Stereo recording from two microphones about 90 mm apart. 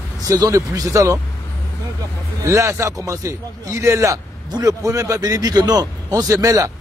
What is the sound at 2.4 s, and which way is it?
A man's voice, 35° right (ahead or behind).